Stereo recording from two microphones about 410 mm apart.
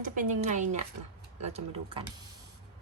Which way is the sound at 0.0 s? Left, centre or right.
Centre.